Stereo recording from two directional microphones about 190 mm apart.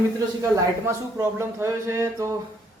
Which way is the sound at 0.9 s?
15° right (ahead or behind).